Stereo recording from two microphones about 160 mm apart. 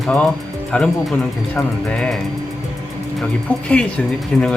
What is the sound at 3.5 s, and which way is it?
Speech, 10° left (ahead or behind).